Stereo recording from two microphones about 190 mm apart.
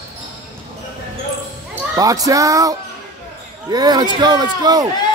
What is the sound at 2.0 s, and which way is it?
Speech, 20° right (ahead or behind).